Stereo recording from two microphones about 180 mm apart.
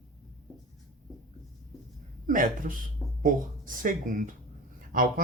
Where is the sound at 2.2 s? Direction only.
50° right (ahead or behind).